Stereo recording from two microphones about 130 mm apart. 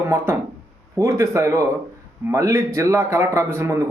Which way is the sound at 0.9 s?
25° right (ahead or behind).